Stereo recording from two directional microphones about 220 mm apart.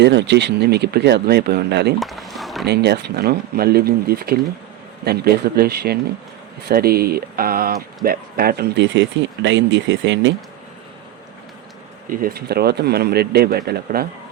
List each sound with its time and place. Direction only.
0.0 s speech: 50° right (ahead or behind)
2.0 s a sound: centre (ahead or behind)
2.6 s speech: 50° right (ahead or behind)
12.0 s speech: 45° right (ahead or behind)